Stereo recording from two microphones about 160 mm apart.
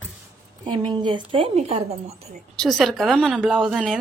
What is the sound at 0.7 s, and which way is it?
Speech, 30° right (ahead or behind).